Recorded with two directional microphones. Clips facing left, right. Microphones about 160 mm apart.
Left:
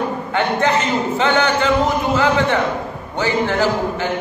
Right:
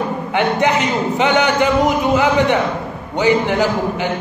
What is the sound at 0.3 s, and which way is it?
A man's voice, 15° right (ahead or behind).